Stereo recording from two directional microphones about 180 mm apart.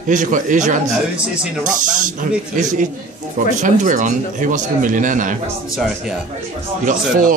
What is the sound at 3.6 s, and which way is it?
A man's voice, 45° right (ahead or behind).